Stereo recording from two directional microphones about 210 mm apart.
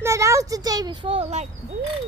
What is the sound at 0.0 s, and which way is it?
A child's voice, 15° right (ahead or behind).